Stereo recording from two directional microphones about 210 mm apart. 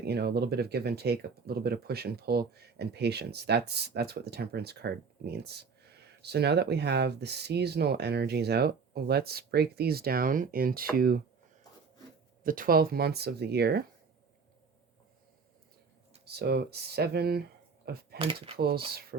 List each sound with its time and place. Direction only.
0.0 s speech: 50° right (ahead or behind)
12.4 s speech: 40° right (ahead or behind)
16.2 s speech: 50° right (ahead or behind)
18.2 s speech: 25° right (ahead or behind)
18.5 s speech: 50° right (ahead or behind)